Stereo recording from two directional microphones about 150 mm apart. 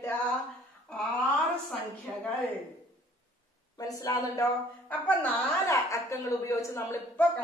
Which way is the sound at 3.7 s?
25° left (ahead or behind).